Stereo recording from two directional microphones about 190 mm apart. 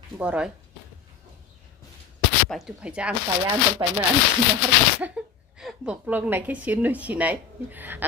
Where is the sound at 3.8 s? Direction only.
20° right (ahead or behind).